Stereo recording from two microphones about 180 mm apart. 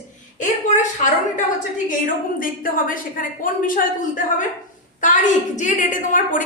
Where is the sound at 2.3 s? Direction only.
50° left (ahead or behind).